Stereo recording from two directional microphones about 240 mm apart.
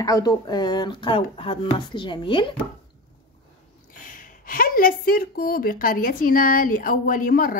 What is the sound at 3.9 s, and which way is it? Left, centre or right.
Speech, left.